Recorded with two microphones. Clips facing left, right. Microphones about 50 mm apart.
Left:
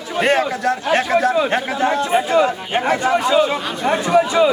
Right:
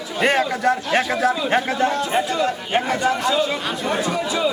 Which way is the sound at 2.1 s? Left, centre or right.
Centre.